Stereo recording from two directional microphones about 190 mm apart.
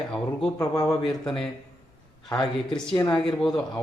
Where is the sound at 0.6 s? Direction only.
20° left (ahead or behind).